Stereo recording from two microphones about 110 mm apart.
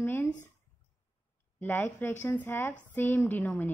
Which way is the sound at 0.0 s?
20° left (ahead or behind).